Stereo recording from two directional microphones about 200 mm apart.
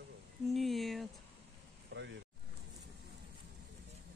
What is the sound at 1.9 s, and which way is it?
Speech, 60° right (ahead or behind).